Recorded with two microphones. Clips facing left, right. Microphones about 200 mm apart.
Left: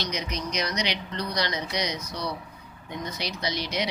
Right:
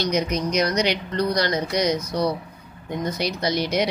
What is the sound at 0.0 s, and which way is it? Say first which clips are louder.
Speech: right 9 dB; 50° right (ahead or behind).